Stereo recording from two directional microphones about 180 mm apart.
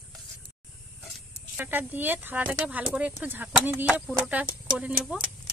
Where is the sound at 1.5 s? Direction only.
10° right (ahead or behind).